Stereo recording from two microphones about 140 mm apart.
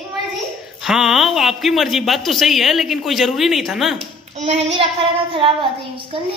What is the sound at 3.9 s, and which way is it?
Speech, 50° right (ahead or behind).